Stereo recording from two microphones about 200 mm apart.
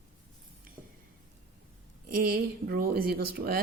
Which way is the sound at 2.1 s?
45° right (ahead or behind).